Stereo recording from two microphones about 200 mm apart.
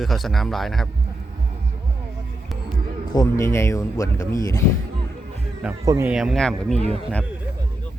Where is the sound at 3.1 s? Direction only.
15° left (ahead or behind).